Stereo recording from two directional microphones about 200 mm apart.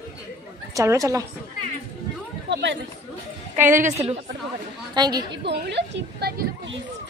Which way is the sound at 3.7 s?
40° right (ahead or behind).